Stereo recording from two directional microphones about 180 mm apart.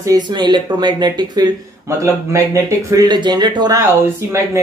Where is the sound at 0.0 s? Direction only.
20° right (ahead or behind).